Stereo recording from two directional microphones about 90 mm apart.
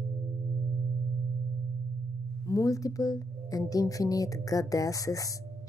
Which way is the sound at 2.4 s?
40° left (ahead or behind).